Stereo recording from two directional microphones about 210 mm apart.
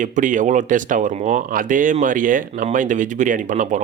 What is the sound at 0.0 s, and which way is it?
Speech, 40° right (ahead or behind).